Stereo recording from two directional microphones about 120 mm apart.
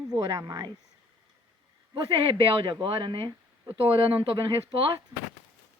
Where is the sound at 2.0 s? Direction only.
50° right (ahead or behind).